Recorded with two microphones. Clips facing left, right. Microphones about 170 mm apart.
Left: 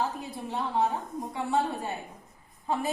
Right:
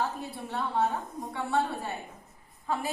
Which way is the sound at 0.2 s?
20° left (ahead or behind).